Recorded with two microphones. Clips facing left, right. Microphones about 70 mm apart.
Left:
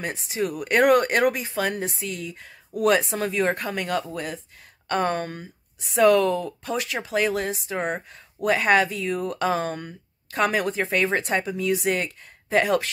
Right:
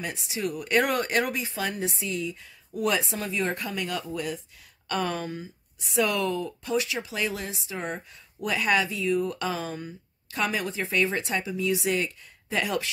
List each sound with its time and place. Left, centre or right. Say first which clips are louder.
0.0 s a woman's voice: left 4 dB; left
5.9 s speech: left 8 dB; left